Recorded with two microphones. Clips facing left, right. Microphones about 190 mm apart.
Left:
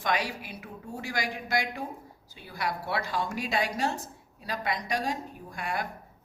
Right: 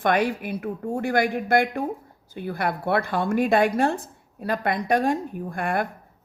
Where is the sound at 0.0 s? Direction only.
55° right (ahead or behind).